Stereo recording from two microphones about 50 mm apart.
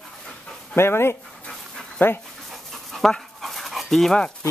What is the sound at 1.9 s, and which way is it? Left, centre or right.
Speech, left.